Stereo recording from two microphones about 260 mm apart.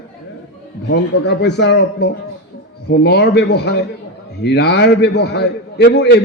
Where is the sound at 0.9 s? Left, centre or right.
Left.